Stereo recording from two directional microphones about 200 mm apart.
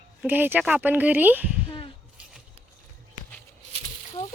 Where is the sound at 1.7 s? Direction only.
25° left (ahead or behind).